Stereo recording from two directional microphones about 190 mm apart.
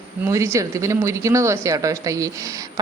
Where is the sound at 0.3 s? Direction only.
15° right (ahead or behind).